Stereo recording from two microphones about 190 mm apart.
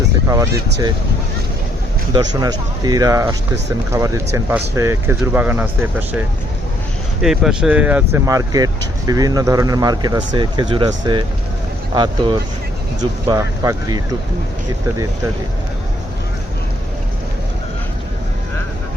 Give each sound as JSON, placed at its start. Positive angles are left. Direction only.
{"t": 0.3, "sound": "speech", "side_deg": -20}
{"t": 2.1, "sound": "speech", "side_deg": -20}
{"t": 7.2, "sound": "speech", "side_deg": 0}